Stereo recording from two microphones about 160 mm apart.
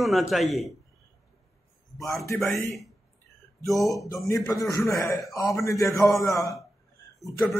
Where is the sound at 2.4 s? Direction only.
15° left (ahead or behind).